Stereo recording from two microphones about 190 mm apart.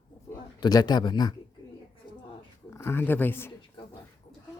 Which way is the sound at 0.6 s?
20° left (ahead or behind).